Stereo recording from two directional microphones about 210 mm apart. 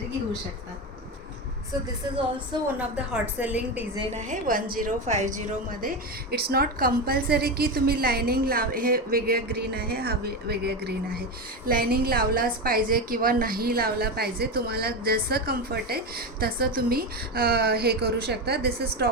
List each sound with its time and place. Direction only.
2.7 s a woman's voice: 5° right (ahead or behind)
3.9 s a woman's voice: 25° right (ahead or behind)
4.3 s a woman's voice: 40° right (ahead or behind)
5.8 s a woman's voice: 45° right (ahead or behind)